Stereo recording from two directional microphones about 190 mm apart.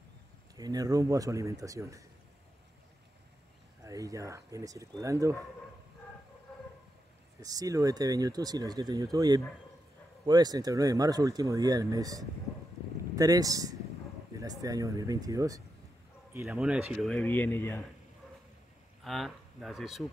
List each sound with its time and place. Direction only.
0.6 s speech: 20° right (ahead or behind)
3.8 s speech: 15° right (ahead or behind)
7.3 s speech: 20° right (ahead or behind)
16.4 s speech: 5° right (ahead or behind); by 17.8 s 10° left (ahead or behind)
19.0 s speech: centre (ahead or behind)